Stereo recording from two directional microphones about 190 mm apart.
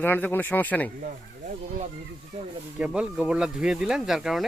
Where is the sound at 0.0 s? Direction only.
10° left (ahead or behind).